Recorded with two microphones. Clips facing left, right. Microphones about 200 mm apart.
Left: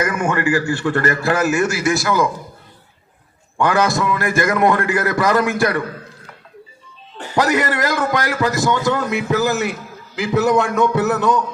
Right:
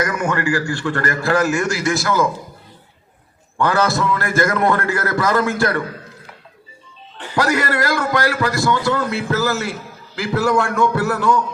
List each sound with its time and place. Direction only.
0.0 s a man's voice: 20° left (ahead or behind)
3.6 s a man's voice: 15° left (ahead or behind)
7.3 s a man's voice: 20° left (ahead or behind)